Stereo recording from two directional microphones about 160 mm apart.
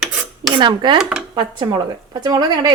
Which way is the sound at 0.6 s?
30° right (ahead or behind).